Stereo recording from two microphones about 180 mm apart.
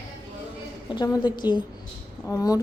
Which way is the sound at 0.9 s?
25° left (ahead or behind).